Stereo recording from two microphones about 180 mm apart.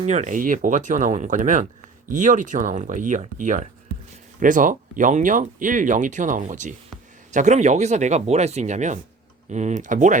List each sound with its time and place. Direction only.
0.0 s speech: 40° right (ahead or behind)